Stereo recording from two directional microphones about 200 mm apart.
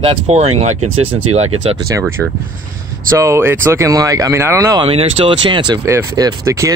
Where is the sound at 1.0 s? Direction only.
85° right.